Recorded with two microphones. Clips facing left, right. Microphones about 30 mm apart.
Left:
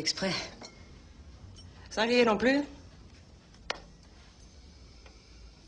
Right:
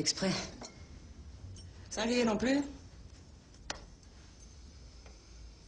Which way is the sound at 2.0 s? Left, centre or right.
Left.